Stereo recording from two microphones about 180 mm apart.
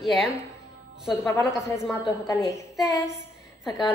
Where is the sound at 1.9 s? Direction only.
15° left (ahead or behind).